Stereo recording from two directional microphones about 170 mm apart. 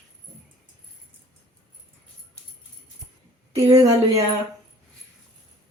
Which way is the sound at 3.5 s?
20° right (ahead or behind).